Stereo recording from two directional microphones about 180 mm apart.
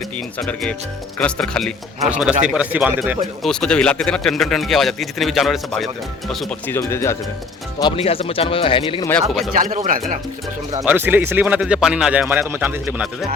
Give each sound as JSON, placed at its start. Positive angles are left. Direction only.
{"t": 0.3, "sound": "speech", "side_deg": 5}
{"t": 2.0, "sound": "speech", "side_deg": -5}
{"t": 3.4, "sound": "speech", "side_deg": 5}
{"t": 6.7, "sound": "speech", "side_deg": 15}
{"t": 7.8, "sound": "speech", "side_deg": 30}
{"t": 9.6, "sound": "speech", "side_deg": -45}
{"t": 10.8, "sound": "speech", "side_deg": -10}